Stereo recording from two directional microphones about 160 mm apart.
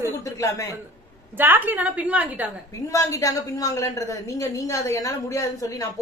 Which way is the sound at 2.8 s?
20° left (ahead or behind).